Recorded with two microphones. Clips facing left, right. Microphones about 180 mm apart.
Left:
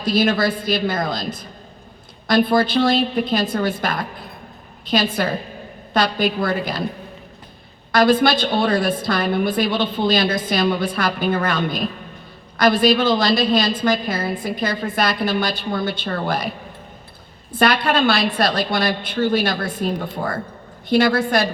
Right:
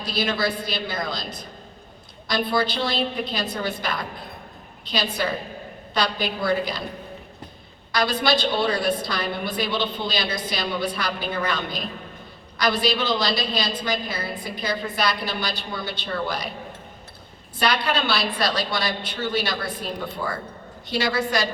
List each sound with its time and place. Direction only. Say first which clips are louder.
0.0 s a woman's voice: left 7 dB; 50° left (ahead or behind)
2.2 s a woman's voice: left 7 dB; 50° left (ahead or behind)
7.9 s a woman's voice: left 7 dB; 50° left (ahead or behind)
17.5 s a woman's voice: left 6 dB; 50° left (ahead or behind)